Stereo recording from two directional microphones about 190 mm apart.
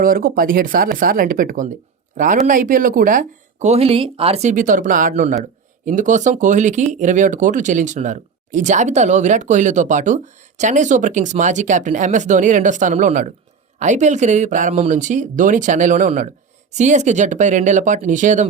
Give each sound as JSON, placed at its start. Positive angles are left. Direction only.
{"t": 0.0, "sound": "speech", "side_deg": -50}